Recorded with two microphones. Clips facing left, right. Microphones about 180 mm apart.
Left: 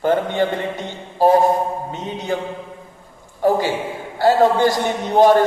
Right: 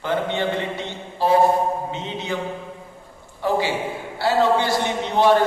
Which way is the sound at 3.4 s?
45° left (ahead or behind).